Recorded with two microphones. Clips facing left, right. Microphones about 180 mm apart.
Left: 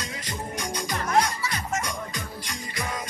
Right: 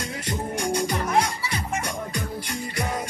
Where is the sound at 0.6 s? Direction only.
65° right (ahead or behind).